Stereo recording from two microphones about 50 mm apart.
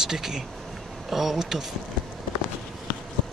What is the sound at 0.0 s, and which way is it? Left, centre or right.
Speech, centre.